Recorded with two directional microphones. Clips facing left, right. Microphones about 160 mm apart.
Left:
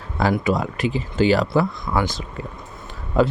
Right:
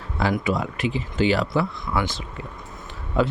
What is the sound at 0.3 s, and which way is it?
Speech, 40° left (ahead or behind).